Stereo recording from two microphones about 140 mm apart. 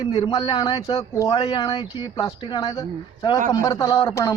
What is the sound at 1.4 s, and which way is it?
Speech, 35° left (ahead or behind).